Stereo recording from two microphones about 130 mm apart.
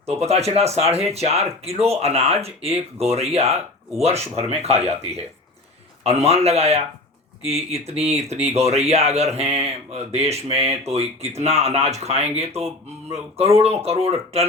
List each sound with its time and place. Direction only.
0.0 s speech: 50° right (ahead or behind)